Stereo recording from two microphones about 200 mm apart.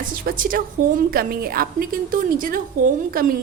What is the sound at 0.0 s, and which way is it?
A woman's voice, 45° right (ahead or behind).